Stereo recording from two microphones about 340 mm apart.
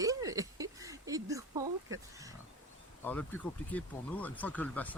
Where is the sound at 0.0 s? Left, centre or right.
Centre.